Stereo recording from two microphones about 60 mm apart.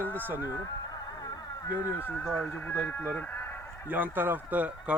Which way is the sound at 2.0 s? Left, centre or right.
Left.